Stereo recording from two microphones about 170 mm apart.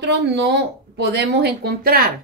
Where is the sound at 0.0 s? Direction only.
80° right.